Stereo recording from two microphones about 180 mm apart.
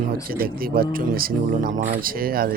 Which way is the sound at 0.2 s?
55° right (ahead or behind).